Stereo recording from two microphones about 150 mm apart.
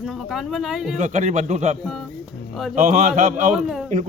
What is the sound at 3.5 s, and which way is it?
Speech, centre (ahead or behind).